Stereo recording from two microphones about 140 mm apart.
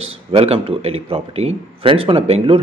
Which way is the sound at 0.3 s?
45° right (ahead or behind).